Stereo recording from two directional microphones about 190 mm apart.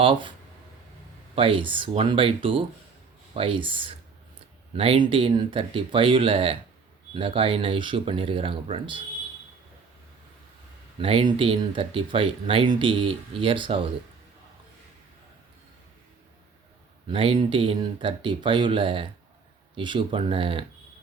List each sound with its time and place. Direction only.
0.0 s speech: 25° right (ahead or behind)
1.4 s speech: 25° right (ahead or behind)
11.0 s speech: 25° right (ahead or behind)
17.1 s speech: 30° right (ahead or behind)